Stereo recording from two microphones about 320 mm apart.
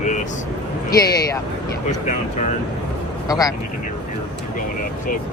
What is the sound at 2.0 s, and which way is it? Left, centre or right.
Speech, left.